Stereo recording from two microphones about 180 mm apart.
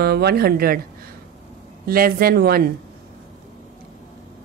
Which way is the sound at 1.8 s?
55° right (ahead or behind).